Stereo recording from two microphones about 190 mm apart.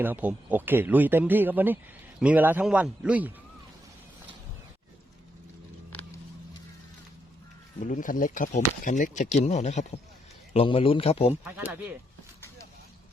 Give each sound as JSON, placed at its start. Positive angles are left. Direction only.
{"t": 0.0, "sound": "speech", "side_deg": -10}
{"t": 7.8, "sound": "speech", "side_deg": 40}
{"t": 11.4, "sound": "speech", "side_deg": -5}